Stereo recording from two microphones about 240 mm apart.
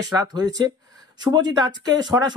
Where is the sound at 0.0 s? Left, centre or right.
Centre.